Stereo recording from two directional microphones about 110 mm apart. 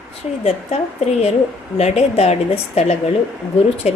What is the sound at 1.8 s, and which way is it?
A woman's voice, 85° left.